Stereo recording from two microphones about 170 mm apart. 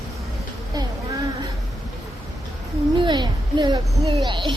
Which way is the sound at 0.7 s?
20° right (ahead or behind).